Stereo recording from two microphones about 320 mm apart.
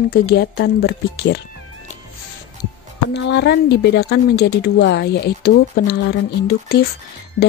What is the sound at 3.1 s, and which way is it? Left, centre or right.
Speech, left.